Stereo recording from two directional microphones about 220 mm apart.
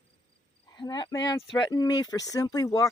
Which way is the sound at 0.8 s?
20° left (ahead or behind).